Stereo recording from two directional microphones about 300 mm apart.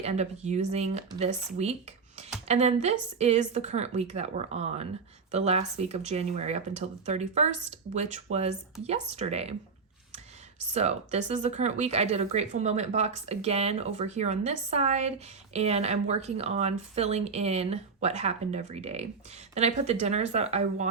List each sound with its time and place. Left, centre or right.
0.0 s speech: right
10.8 s speech: right